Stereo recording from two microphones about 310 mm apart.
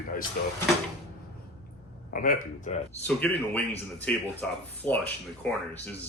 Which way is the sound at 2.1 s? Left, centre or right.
Left.